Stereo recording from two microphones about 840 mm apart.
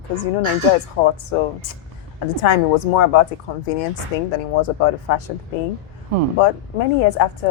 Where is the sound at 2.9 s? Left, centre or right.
Left.